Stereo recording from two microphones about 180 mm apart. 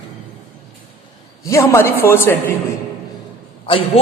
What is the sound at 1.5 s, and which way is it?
Speech, 15° left (ahead or behind).